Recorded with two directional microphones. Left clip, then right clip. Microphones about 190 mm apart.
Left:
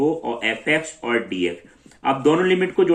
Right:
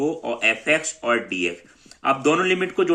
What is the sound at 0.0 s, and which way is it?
Speech, 35° right (ahead or behind).